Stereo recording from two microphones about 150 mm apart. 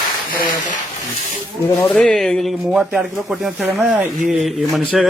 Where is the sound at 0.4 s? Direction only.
55° left (ahead or behind).